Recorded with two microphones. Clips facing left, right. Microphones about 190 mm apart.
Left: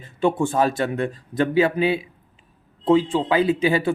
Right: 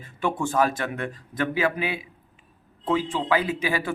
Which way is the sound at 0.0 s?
25° left (ahead or behind).